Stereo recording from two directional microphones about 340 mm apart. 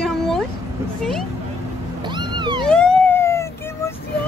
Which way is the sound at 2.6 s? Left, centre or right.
Centre.